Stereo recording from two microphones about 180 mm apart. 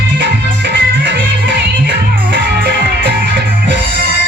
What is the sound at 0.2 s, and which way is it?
Music, 80° right.